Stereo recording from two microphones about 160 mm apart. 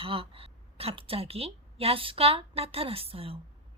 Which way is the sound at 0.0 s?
35° right (ahead or behind).